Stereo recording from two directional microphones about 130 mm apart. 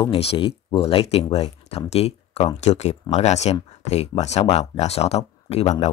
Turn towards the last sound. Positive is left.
turn(degrees=60)  # may be behind; listen again after turning